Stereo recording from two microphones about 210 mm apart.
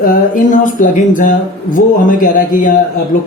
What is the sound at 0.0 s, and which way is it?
Speech, 40° left (ahead or behind).